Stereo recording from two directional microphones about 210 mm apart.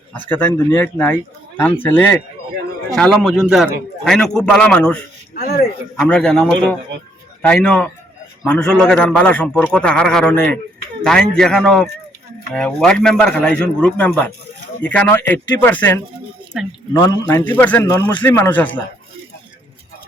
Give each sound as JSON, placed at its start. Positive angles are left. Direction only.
{"t": 0.3, "sound": "a man's voice", "side_deg": 10}
{"t": 5.3, "sound": "speech", "side_deg": 45}
{"t": 6.0, "sound": "a man's voice", "side_deg": 5}